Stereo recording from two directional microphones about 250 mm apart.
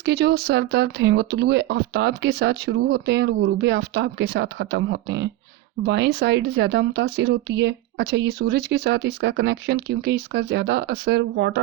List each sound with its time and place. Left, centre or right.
0.0 s speech: right